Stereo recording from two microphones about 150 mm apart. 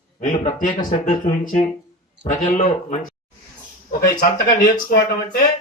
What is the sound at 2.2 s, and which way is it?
Speech, 55° left (ahead or behind).